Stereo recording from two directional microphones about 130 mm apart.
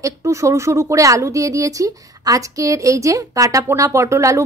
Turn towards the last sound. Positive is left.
turn(degrees=-25)  # may be behind; listen again after turning